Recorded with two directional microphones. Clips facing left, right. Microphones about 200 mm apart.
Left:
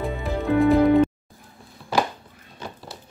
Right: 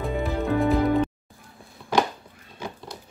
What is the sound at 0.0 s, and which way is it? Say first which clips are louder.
Music: even; centre (ahead or behind).